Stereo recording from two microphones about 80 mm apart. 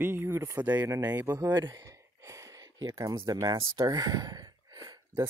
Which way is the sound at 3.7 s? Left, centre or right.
Right.